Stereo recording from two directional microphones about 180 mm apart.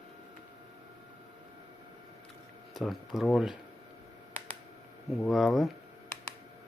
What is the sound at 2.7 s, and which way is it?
Speech, centre (ahead or behind).